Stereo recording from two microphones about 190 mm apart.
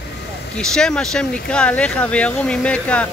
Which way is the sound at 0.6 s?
5° left (ahead or behind).